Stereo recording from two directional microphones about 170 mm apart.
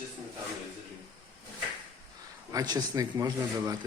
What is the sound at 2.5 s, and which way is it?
Speech, 20° right (ahead or behind).